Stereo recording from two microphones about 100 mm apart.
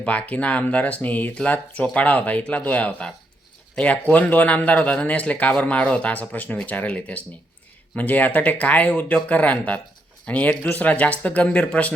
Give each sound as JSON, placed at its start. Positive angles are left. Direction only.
{"t": 0.0, "sound": "speech", "side_deg": 15}